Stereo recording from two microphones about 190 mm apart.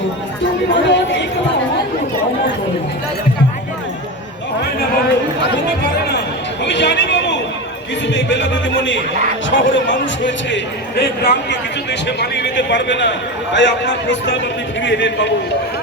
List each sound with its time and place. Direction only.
0.7 s chatter: 70° left (ahead or behind)
6.7 s a sound: 65° left (ahead or behind)
8.1 s a man's voice: 70° left (ahead or behind)